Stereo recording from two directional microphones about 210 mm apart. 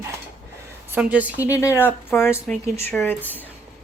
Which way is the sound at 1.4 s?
15° left (ahead or behind).